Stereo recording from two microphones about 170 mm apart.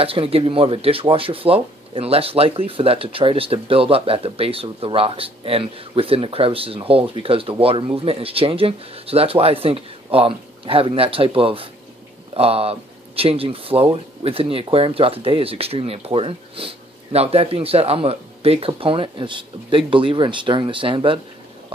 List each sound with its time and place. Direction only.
0.0 s speech: 35° right (ahead or behind)